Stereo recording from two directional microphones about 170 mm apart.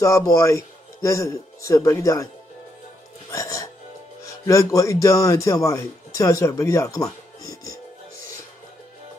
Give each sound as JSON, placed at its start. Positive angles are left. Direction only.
{"t": 0.0, "sound": "speech", "side_deg": 20}
{"t": 3.3, "sound": "music", "side_deg": 20}
{"t": 4.3, "sound": "a man's voice", "side_deg": 20}